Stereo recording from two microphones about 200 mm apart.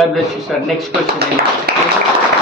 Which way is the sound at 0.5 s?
Centre (ahead or behind).